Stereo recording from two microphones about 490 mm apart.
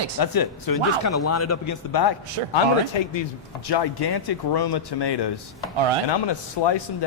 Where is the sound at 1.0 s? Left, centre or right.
Left.